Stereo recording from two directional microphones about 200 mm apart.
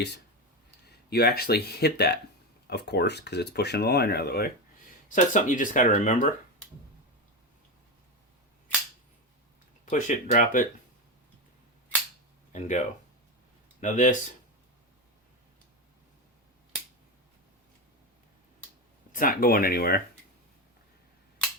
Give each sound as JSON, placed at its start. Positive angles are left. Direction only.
{"t": 1.1, "sound": "speech", "side_deg": 50}
{"t": 5.1, "sound": "speech", "side_deg": 40}
{"t": 9.9, "sound": "speech", "side_deg": 35}
{"t": 12.5, "sound": "speech", "side_deg": 35}
{"t": 13.8, "sound": "speech", "side_deg": 40}
{"t": 19.1, "sound": "speech", "side_deg": 45}